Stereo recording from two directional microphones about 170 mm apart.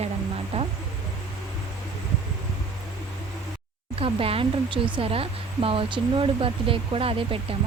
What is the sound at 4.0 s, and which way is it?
Speech, 35° right (ahead or behind).